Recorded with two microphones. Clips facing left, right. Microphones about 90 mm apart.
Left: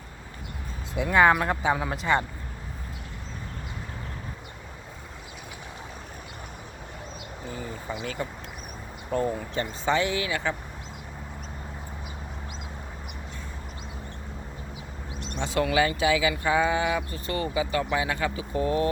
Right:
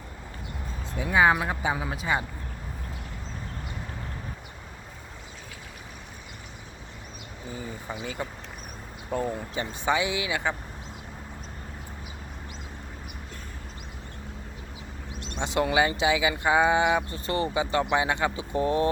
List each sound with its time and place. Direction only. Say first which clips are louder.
0.9 s speech: left 2 dB; 5° right (ahead or behind)
8.0 s speech: left 1 dB; 10° right (ahead or behind)
15.4 s speech: even; 20° right (ahead or behind)